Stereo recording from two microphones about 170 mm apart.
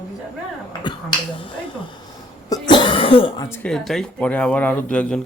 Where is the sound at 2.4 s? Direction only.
25° left (ahead or behind).